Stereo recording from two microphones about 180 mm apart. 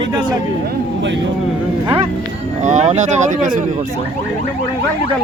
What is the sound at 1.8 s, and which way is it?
Speech, 30° right (ahead or behind).